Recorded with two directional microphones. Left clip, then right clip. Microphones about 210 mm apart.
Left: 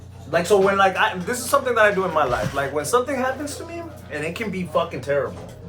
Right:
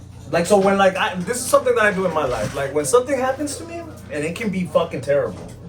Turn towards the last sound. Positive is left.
turn(degrees=20)  # may be behind; listen again after turning